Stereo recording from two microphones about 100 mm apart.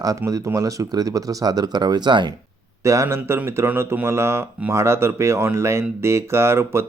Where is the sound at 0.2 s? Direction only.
30° right (ahead or behind); by 2.3 s 50° right (ahead or behind).